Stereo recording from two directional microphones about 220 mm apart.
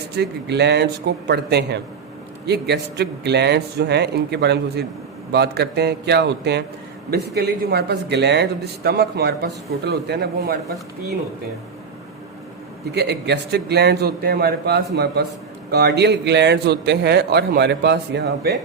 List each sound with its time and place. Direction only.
0.2 s a man's voice: 50° right (ahead or behind)
12.9 s a man's voice: 50° right (ahead or behind)